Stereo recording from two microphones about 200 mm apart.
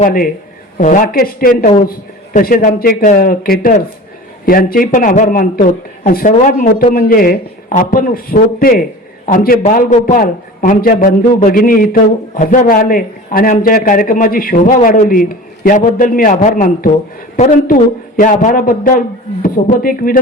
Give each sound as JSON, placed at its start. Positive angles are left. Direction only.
{"t": 0.0, "sound": "a man's voice", "side_deg": 45}